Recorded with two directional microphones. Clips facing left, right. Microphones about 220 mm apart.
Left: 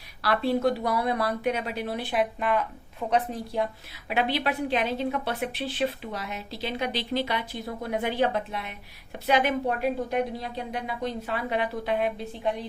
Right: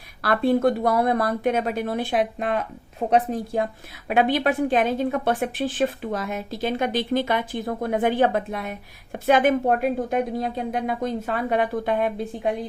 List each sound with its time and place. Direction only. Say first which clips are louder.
0.2 s a woman's voice: right 5 dB; 50° right (ahead or behind)
4.1 s a woman's voice: right 6 dB; 50° right (ahead or behind)